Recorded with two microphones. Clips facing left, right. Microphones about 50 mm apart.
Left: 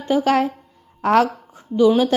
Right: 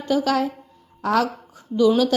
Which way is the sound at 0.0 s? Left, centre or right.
Left.